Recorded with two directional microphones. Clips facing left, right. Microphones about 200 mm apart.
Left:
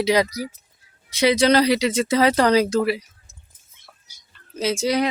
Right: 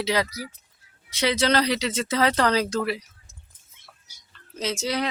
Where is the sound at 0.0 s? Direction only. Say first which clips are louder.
Left 6 dB; 15° left (ahead or behind).